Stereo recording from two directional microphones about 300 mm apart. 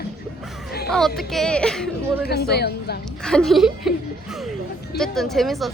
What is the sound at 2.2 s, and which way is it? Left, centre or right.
Speech, left.